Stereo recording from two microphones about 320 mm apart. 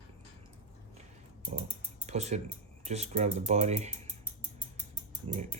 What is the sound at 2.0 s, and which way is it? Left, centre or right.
Speech, right.